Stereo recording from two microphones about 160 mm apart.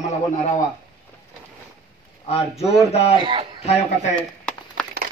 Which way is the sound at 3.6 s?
40° left (ahead or behind).